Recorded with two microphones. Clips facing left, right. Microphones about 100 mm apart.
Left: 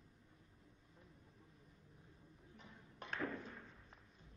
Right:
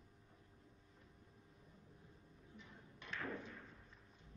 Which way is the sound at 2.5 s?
50° left (ahead or behind).